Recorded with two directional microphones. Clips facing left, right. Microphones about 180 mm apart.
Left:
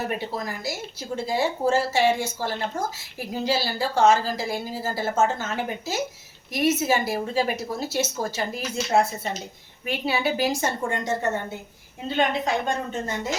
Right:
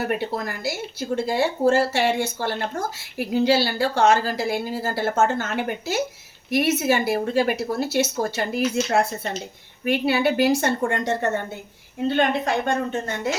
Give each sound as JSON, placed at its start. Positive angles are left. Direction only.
{"t": 0.1, "sound": "a woman's voice", "side_deg": -60}